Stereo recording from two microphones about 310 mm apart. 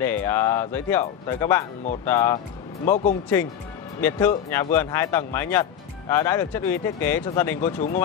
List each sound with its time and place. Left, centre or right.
0.0 s speech: centre
2.8 s speech: left
4.0 s speech: centre